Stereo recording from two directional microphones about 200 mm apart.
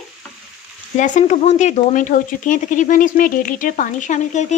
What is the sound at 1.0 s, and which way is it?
Speech, 35° left (ahead or behind).